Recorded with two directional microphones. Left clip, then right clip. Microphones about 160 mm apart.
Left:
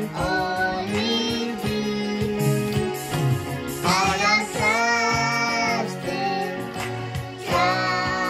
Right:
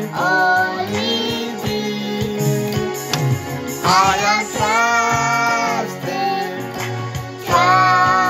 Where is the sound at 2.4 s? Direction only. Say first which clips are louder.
Right 5 dB; 30° right (ahead or behind).